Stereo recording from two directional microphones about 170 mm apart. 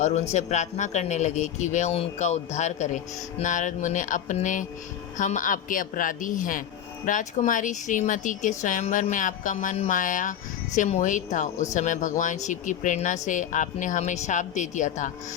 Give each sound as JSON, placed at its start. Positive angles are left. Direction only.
{"t": 0.0, "sound": "speech", "side_deg": 40}